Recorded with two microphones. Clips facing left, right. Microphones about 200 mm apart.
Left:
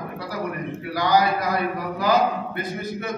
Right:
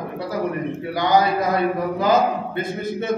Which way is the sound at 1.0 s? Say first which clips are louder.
Right 2 dB; 25° right (ahead or behind).